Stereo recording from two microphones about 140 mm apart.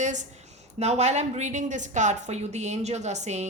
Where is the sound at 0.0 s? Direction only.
60° right (ahead or behind).